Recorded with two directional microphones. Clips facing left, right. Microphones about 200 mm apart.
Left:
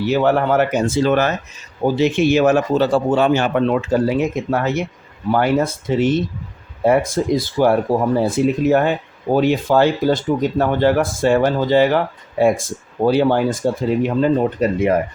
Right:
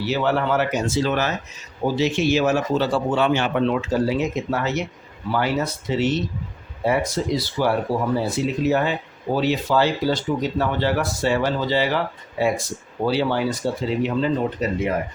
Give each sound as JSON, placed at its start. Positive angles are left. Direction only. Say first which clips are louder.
{"t": 0.0, "sound": "speech", "louder": "left 5 dB", "side_deg": 50}